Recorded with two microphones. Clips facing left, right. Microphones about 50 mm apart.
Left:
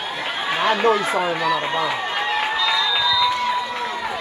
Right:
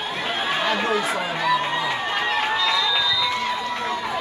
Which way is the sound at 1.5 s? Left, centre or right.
Centre.